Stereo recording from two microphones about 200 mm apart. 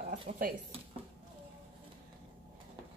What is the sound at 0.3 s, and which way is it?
Speech, 45° right (ahead or behind).